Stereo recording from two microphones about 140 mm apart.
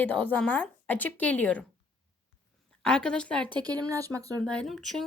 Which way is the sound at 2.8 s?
5° left (ahead or behind).